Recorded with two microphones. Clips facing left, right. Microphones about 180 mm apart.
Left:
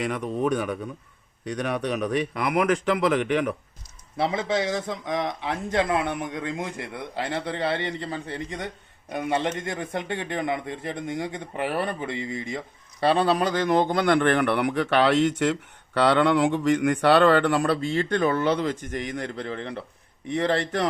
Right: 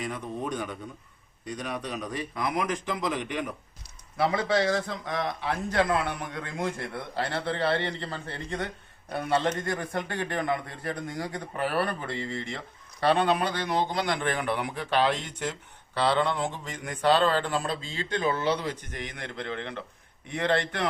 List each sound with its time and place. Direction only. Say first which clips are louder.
0.0 s speech: left 7 dB; 80° left
4.2 s a man's voice: even; 25° left (ahead or behind)
13.0 s speech: left 3 dB; 30° left (ahead or behind); by 15.5 s 90° left
16.0 s speech: left 6 dB; 75° left (ahead or behind); by 20.8 s 35° left (ahead or behind)